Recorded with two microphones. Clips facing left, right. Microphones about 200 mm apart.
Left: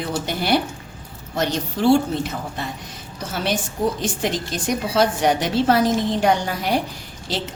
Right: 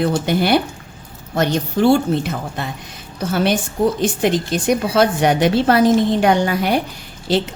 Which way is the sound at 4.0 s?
60° right (ahead or behind).